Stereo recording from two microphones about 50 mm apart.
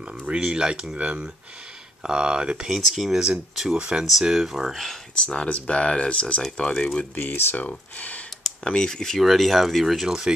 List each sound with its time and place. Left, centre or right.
0.3 s speech: centre
0.9 s speech: right; by 3.3 s centre
3.7 s speech: centre
4.0 s speech: centre
5.1 s speech: centre
7.2 s speech: left
8.6 s speech: centre
10.0 s speech: centre